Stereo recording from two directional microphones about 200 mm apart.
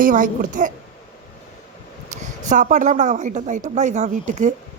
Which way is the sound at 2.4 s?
40° right (ahead or behind).